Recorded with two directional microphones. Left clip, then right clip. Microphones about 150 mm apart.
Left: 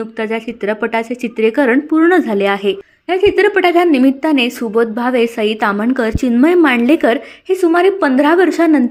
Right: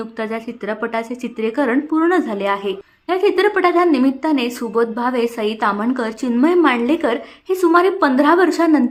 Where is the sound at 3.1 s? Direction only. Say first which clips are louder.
Left 4 dB; 20° left (ahead or behind).